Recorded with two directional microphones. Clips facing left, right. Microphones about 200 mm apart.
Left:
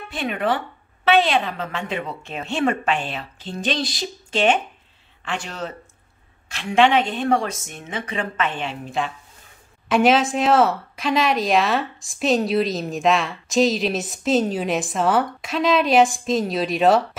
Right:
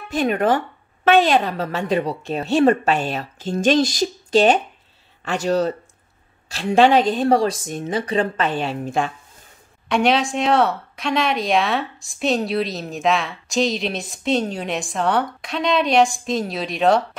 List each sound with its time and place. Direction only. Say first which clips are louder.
0.1 s a woman's voice: right 5 dB; 45° right (ahead or behind)
9.8 s speech: left 2 dB; centre (ahead or behind)